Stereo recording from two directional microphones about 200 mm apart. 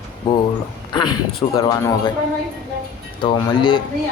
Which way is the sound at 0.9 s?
25° left (ahead or behind).